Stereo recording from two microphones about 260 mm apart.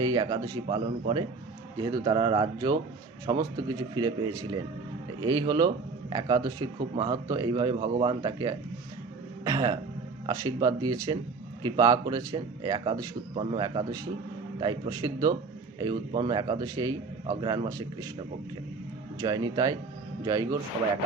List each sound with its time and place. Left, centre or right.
0.0 s a man's voice: centre
1.8 s a man's voice: centre
19.2 s a man's voice: centre